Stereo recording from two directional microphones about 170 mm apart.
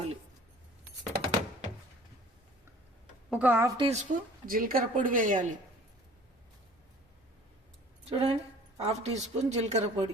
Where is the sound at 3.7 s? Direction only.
35° right (ahead or behind).